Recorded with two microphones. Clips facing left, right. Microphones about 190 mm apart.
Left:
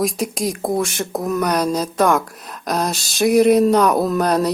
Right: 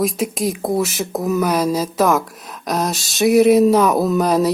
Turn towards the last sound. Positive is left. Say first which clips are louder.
# right 2 dB
turn(degrees=0)  # may be behind; listen again after turning